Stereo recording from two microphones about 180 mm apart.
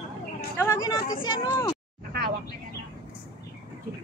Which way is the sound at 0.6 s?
15° left (ahead or behind).